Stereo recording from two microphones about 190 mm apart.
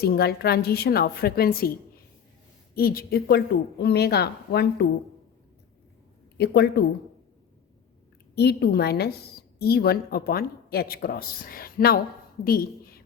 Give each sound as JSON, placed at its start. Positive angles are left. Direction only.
{"t": 0.0, "sound": "a woman's voice", "side_deg": 55}
{"t": 2.7, "sound": "a woman's voice", "side_deg": 50}
{"t": 6.3, "sound": "a woman's voice", "side_deg": 60}
{"t": 8.4, "sound": "a woman's voice", "side_deg": 60}